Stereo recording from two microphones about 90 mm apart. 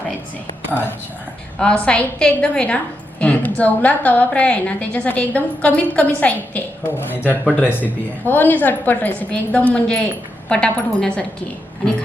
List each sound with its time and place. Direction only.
0.7 s a woman's voice: 25° left (ahead or behind)
1.5 s a woman's voice: 10° left (ahead or behind)